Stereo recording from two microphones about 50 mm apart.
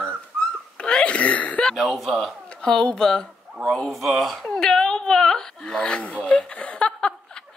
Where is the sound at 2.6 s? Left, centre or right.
Centre.